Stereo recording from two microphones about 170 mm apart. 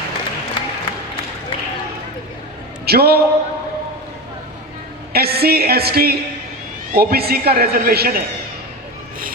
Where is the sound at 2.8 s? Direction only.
65° right (ahead or behind).